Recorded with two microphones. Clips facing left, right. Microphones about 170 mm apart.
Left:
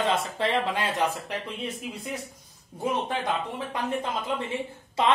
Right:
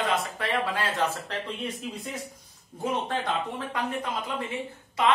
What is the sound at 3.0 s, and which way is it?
Speech, 10° left (ahead or behind).